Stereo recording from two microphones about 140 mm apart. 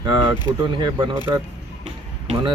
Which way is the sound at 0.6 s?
30° right (ahead or behind).